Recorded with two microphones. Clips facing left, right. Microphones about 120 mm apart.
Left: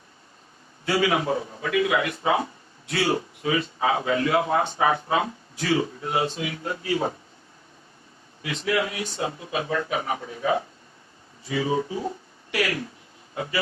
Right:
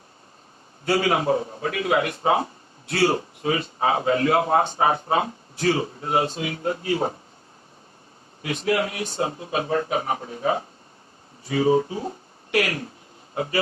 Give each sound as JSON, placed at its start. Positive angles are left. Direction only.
{"t": 0.9, "sound": "a man's voice", "side_deg": -40}
{"t": 8.4, "sound": "a man's voice", "side_deg": -40}